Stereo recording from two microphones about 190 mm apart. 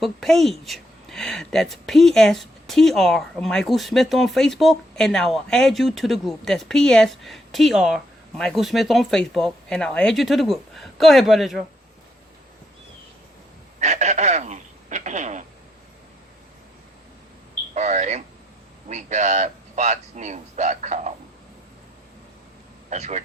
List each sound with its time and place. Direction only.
0.0 s a woman's voice: centre (ahead or behind)
13.7 s speech: 40° right (ahead or behind)
17.7 s a man's voice: 40° right (ahead or behind)
22.9 s a man's voice: 40° right (ahead or behind)